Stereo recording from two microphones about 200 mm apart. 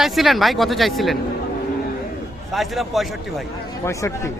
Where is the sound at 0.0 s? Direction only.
Centre (ahead or behind).